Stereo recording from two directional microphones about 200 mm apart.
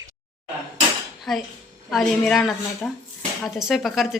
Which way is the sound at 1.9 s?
Centre (ahead or behind).